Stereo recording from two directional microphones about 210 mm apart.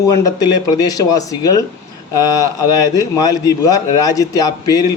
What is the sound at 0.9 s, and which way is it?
Speech, 15° left (ahead or behind).